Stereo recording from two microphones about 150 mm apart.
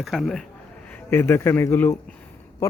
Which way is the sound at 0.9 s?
15° left (ahead or behind).